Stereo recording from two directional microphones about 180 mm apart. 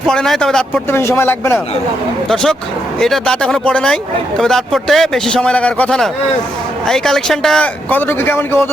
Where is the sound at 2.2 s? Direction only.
5° left (ahead or behind).